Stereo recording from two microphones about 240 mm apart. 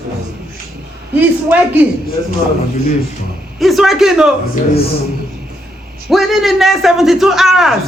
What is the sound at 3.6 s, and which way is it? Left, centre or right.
Speech, centre.